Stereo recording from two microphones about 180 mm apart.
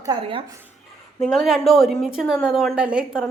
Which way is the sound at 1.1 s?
Centre (ahead or behind).